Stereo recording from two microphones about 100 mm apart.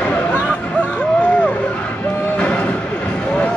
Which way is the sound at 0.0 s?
15° left (ahead or behind).